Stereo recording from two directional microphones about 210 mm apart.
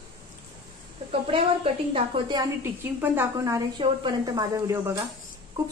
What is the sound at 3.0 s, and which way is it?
Speech, 10° right (ahead or behind).